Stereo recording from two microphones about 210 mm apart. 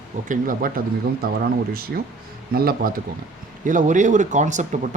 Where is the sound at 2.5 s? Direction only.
45° right (ahead or behind).